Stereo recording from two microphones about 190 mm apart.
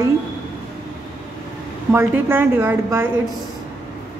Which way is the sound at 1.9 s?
10° right (ahead or behind).